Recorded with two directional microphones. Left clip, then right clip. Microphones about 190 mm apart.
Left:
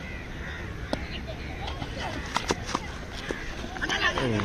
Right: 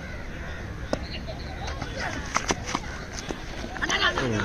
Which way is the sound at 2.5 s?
35° right (ahead or behind).